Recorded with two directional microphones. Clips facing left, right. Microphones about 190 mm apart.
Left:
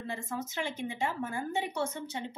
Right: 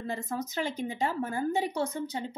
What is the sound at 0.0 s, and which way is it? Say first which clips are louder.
A woman's voice: right 3 dB; 40° right (ahead or behind).